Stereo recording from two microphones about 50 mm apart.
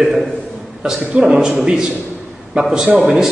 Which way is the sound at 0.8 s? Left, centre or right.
Centre.